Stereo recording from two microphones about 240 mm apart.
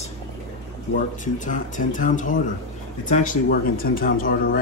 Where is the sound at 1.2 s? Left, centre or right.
Left.